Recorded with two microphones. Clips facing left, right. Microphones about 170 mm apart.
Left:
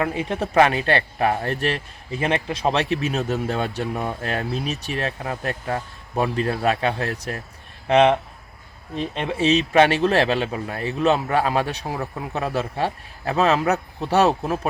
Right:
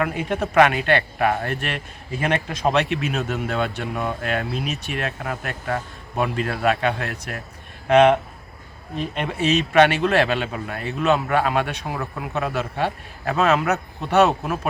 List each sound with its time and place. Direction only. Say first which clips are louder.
0.0 s speech: even; 30° left (ahead or behind)
9.4 s speech: even; 30° left (ahead or behind)